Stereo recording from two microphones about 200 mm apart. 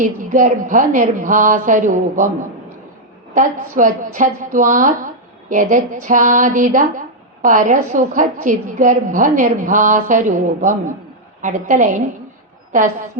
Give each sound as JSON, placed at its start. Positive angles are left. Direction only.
{"t": 0.0, "sound": "a woman's voice", "side_deg": -40}
{"t": 3.3, "sound": "a woman's voice", "side_deg": -40}